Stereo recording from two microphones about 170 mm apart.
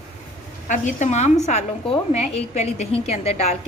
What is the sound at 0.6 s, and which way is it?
A woman's voice, 50° left (ahead or behind).